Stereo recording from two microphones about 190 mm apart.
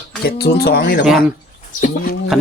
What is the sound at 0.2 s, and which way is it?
Speech, 55° left (ahead or behind).